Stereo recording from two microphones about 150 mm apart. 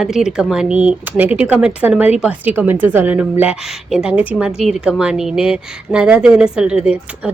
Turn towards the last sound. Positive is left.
turn(degrees=-10)  # may be behind; listen again after turning